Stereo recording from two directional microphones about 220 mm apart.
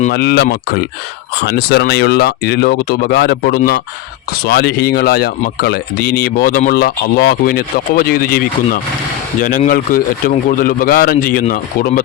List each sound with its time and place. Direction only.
0.1 s a man's voice: 45° left (ahead or behind)